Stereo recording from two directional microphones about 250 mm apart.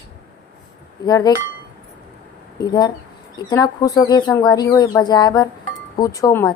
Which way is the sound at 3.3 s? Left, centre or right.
Centre.